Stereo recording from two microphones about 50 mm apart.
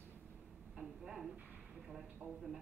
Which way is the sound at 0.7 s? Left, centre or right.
Centre.